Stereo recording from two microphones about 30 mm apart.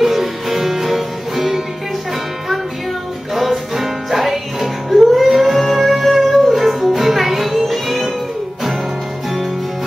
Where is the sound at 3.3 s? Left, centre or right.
Centre.